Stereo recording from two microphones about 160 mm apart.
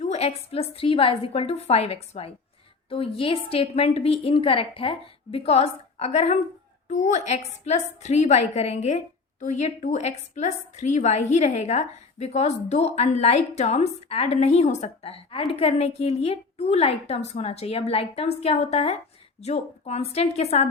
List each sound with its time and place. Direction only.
0.0 s a woman's voice: 40° left (ahead or behind)